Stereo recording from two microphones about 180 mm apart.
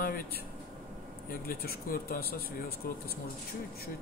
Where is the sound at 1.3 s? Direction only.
55° left (ahead or behind).